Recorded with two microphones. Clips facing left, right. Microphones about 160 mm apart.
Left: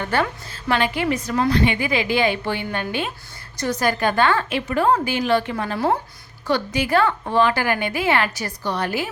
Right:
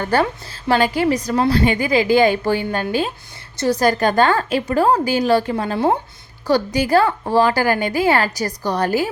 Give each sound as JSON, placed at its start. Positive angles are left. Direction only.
{"t": 0.0, "sound": "a woman's voice", "side_deg": -40}
{"t": 6.5, "sound": "a woman's voice", "side_deg": -35}